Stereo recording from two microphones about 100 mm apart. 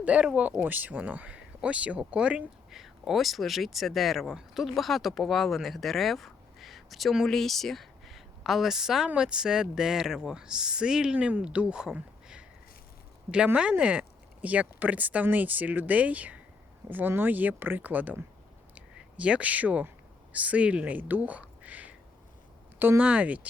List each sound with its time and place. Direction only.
0.0 s speech: 10° right (ahead or behind)
18.7 s a sound: 15° right (ahead or behind)
20.3 s speech: 15° right (ahead or behind)